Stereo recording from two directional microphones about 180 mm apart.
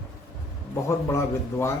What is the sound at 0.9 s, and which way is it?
Speech, 15° left (ahead or behind).